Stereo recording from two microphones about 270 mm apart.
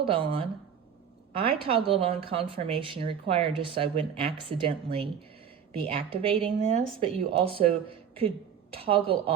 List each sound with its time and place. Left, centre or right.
0.0 s speech: centre